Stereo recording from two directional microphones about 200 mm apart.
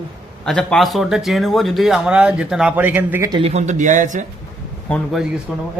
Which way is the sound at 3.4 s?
30° right (ahead or behind).